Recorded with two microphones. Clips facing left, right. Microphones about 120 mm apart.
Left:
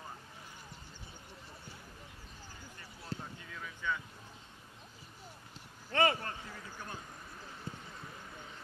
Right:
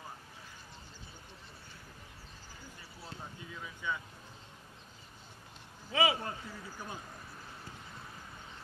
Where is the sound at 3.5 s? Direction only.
15° right (ahead or behind).